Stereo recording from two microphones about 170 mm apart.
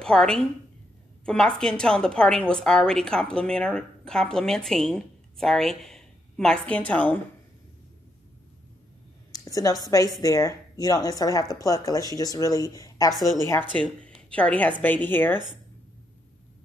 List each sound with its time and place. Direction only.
0.0 s a woman's voice: 5° left (ahead or behind)
9.3 s a woman's voice: 20° left (ahead or behind)
13.1 s a woman's voice: centre (ahead or behind)
13.4 s speech: 15° left (ahead or behind)